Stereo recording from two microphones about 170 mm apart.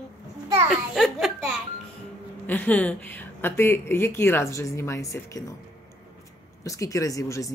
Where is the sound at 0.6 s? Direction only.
Centre (ahead or behind); by 5.4 s 20° left (ahead or behind).